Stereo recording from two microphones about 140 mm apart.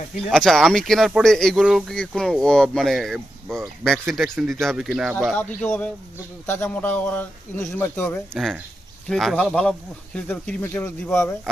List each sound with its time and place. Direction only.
0.3 s speech: 5° left (ahead or behind)
5.3 s speech: 10° left (ahead or behind)
9.0 s speech: centre (ahead or behind); by 10.9 s 15° left (ahead or behind)